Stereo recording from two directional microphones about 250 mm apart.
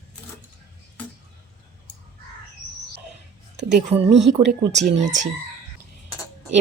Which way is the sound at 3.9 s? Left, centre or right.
Right.